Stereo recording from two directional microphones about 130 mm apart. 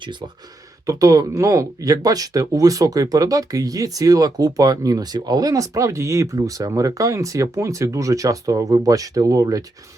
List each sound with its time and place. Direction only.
0.0 s speech: 35° right (ahead or behind)